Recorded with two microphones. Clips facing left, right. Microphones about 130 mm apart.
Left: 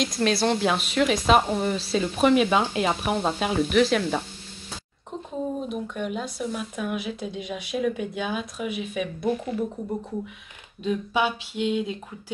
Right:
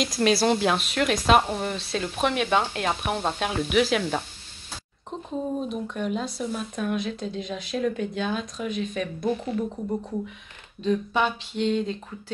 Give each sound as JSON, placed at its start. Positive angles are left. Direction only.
{"t": 0.0, "sound": "speech", "side_deg": -5}
{"t": 5.7, "sound": "speech", "side_deg": 5}
{"t": 10.8, "sound": "speech", "side_deg": 5}